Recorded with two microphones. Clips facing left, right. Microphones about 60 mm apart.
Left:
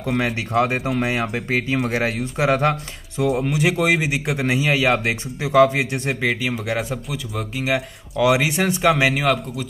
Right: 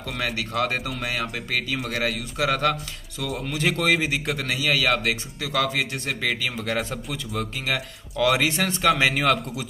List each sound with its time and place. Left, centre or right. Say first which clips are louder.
0.8 s a man's voice: left 7 dB; left
3.3 s a man's voice: left 5 dB; centre
4.4 s a man's voice: left 6 dB; left; by 9.7 s centre